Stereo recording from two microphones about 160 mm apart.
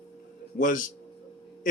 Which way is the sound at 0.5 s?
55° left (ahead or behind).